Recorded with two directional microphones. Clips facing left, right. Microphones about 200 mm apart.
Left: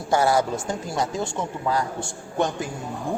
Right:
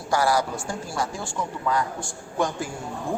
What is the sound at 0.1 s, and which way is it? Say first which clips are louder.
A man's voice: left 2 dB; 25° left (ahead or behind).